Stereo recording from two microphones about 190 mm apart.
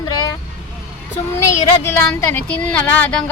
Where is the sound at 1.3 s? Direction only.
15° left (ahead or behind).